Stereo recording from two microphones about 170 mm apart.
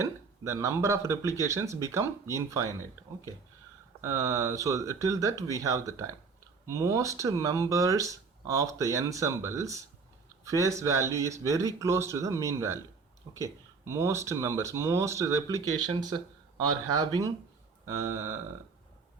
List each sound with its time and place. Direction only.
0.0 s speech: 15° right (ahead or behind)
4.0 s speech: 20° right (ahead or behind)
17.8 s speech: 20° right (ahead or behind)